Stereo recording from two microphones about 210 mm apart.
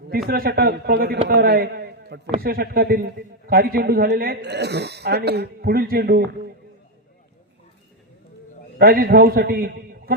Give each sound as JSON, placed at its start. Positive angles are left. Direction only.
{"t": 0.3, "sound": "a man's voice", "side_deg": -45}
{"t": 8.8, "sound": "a man's voice", "side_deg": -45}